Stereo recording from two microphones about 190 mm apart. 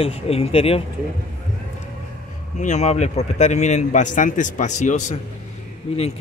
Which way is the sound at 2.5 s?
40° left (ahead or behind).